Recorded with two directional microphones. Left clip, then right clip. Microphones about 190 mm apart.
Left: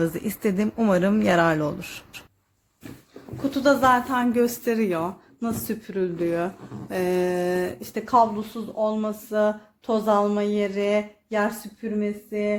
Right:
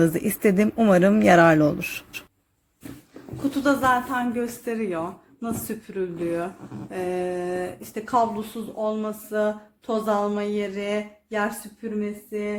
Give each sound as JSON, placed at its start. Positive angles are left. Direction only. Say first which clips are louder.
{"t": 0.0, "sound": "speech", "louder": "right 4 dB", "side_deg": -15}
{"t": 3.5, "sound": "speech", "louder": "left 2 dB", "side_deg": 35}
{"t": 6.9, "sound": "speech", "louder": "left 4 dB", "side_deg": 55}
{"t": 8.0, "sound": "speech", "louder": "left 3 dB", "side_deg": 20}